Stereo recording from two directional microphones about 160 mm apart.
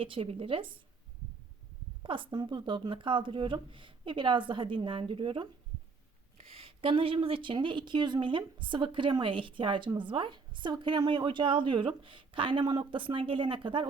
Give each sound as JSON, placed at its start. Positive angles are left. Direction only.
{"t": 0.0, "sound": "a woman's voice", "side_deg": -35}
{"t": 2.0, "sound": "a woman's voice", "side_deg": -30}
{"t": 6.6, "sound": "a woman's voice", "side_deg": -35}